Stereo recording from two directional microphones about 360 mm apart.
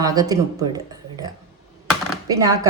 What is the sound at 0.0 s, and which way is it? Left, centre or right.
Speech, centre.